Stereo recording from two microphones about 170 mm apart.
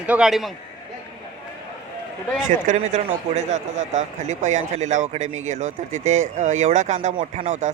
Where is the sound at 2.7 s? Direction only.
45° right (ahead or behind).